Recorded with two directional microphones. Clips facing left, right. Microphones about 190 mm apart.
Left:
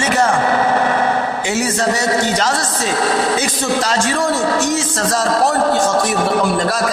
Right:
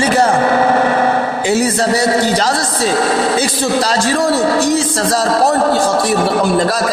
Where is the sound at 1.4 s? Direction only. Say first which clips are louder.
Right 5 dB; 35° right (ahead or behind).